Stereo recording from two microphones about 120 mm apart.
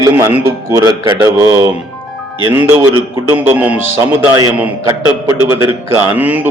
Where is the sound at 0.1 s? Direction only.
15° right (ahead or behind).